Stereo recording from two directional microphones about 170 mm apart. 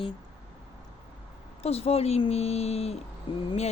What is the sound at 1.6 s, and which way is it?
Speech, 35° left (ahead or behind).